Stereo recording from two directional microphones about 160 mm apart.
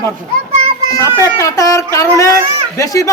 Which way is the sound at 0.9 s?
20° left (ahead or behind).